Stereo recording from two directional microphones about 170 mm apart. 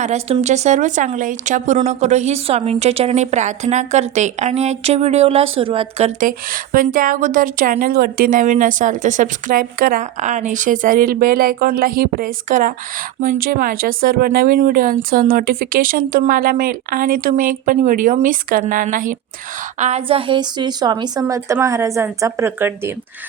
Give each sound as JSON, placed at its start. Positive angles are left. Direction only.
{"t": 0.0, "sound": "speech", "side_deg": -40}
{"t": 6.1, "sound": "a woman's voice", "side_deg": -55}
{"t": 19.8, "sound": "a woman's voice", "side_deg": -35}